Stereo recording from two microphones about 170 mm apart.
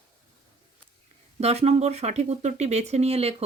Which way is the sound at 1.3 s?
40° right (ahead or behind).